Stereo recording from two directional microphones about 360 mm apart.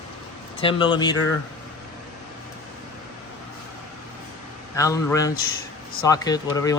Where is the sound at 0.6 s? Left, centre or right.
Centre.